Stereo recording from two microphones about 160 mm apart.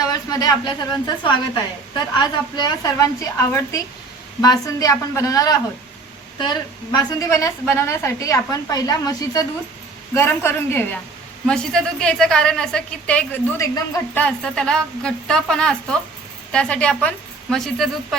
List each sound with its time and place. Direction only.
0.1 s a woman's voice: 25° left (ahead or behind); by 18.2 s centre (ahead or behind)